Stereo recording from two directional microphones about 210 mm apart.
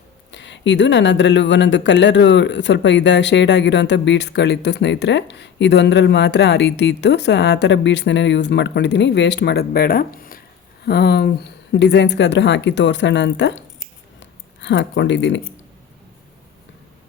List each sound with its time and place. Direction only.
0.3 s speech: 60° left (ahead or behind)